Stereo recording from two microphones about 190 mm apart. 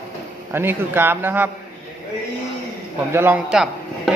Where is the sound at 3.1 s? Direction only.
10° right (ahead or behind).